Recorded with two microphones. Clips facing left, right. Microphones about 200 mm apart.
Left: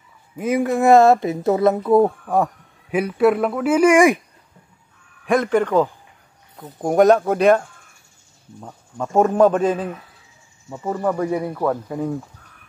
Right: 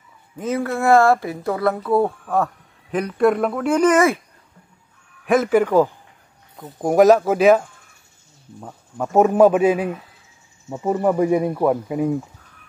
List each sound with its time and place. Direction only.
0.4 s speech: 15° left (ahead or behind)
5.2 s speech: 5° right (ahead or behind)